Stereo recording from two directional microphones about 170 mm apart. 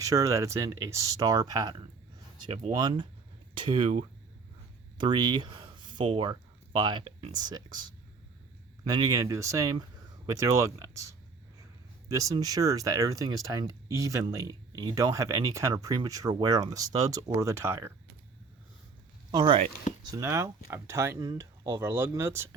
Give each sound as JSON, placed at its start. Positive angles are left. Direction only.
{"t": 0.0, "sound": "speech", "side_deg": -20}
{"t": 4.9, "sound": "a sound", "side_deg": -25}
{"t": 6.1, "sound": "speech", "side_deg": -30}
{"t": 19.3, "sound": "speech", "side_deg": -25}